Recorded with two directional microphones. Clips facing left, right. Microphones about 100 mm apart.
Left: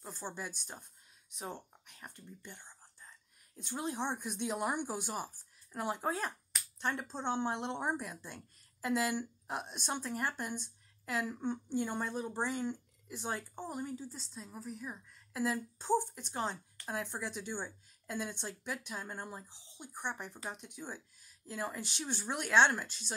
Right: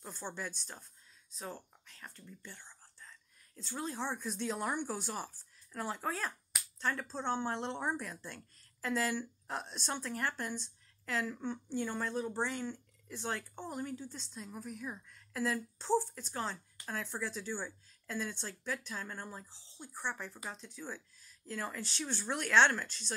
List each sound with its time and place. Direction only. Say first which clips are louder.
0.2 s a woman's voice: right 1 dB; 10° left (ahead or behind)
2.4 s whispering: even; 15° left (ahead or behind)
3.6 s a woman's voice: left 2 dB; 20° left (ahead or behind)